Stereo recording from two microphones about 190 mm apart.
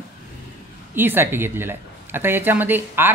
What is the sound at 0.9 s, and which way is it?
A man's voice, 10° right (ahead or behind).